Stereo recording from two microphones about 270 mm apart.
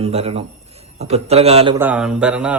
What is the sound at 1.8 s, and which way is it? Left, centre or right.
Speech, centre.